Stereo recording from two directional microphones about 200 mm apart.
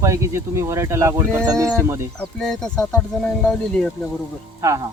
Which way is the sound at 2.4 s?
5° left (ahead or behind).